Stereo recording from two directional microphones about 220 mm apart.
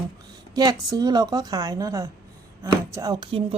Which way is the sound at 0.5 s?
15° right (ahead or behind).